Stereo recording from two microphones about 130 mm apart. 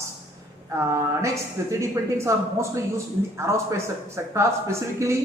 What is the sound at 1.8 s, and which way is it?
Speech, 20° right (ahead or behind).